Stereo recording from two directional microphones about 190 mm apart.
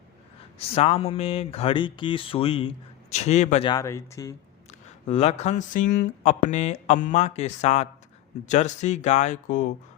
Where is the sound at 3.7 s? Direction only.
15° left (ahead or behind).